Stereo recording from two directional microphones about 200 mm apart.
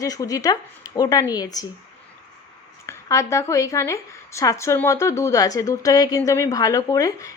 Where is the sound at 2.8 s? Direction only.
15° left (ahead or behind).